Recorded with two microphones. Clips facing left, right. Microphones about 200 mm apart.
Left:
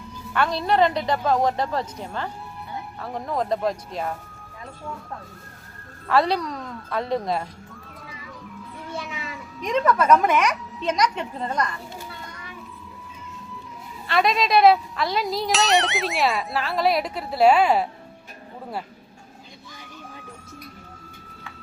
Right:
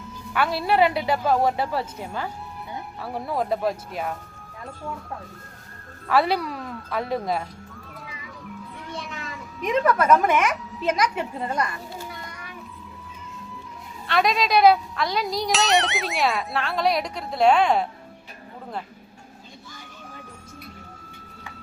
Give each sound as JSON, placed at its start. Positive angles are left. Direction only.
{"t": 0.3, "sound": "a woman's voice", "side_deg": -5}
{"t": 6.1, "sound": "speech", "side_deg": -5}
{"t": 8.9, "sound": "a sound", "side_deg": 5}
{"t": 9.6, "sound": "speech", "side_deg": -5}
{"t": 14.1, "sound": "speech", "side_deg": 0}